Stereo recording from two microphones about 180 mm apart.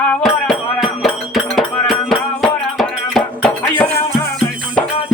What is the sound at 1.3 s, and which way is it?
Music, centre (ahead or behind).